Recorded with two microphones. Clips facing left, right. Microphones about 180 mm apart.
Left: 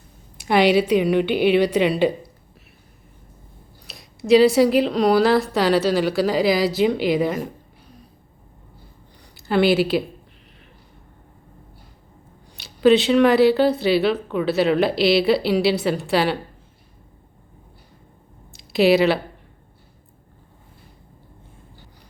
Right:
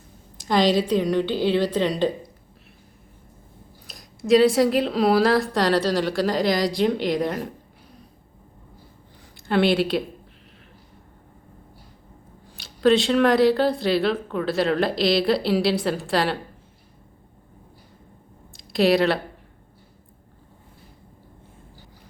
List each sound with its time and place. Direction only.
1.2 s a woman's voice: 65° left (ahead or behind)
1.7 s a woman's voice: 10° left (ahead or behind)
3.9 s speech: centre (ahead or behind)
9.5 s speech: 5° left (ahead or behind)
12.5 s speech: centre (ahead or behind)
18.5 s speech: centre (ahead or behind)